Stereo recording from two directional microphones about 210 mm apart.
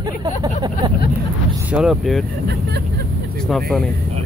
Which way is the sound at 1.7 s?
5° right (ahead or behind).